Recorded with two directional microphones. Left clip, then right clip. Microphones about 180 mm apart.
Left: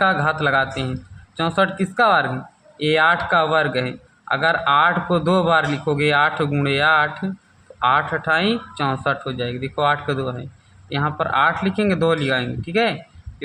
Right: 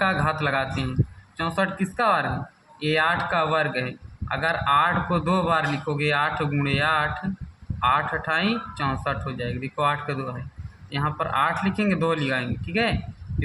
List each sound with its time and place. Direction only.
0.0 s a man's voice: 30° left (ahead or behind)